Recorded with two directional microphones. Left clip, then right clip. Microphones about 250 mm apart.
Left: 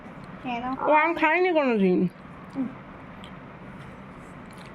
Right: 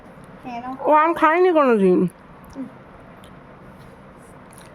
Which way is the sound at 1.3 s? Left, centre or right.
Right.